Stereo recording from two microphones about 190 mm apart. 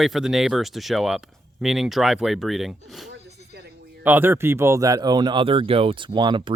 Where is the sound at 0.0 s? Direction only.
Centre (ahead or behind).